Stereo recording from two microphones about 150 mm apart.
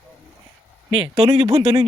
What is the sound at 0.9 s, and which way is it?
Speech, 35° right (ahead or behind).